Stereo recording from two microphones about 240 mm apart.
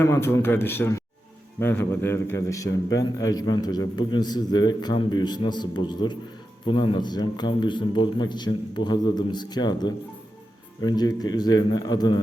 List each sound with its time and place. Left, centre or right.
0.0 s a man's voice: centre